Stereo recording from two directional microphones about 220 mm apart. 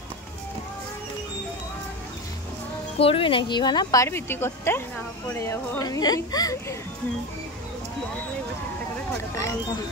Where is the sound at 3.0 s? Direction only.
25° left (ahead or behind).